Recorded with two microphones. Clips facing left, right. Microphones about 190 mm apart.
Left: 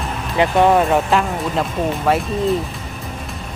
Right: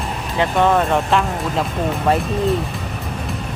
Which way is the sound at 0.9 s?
Centre (ahead or behind).